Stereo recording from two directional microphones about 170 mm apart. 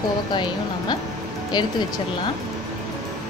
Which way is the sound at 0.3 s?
25° left (ahead or behind).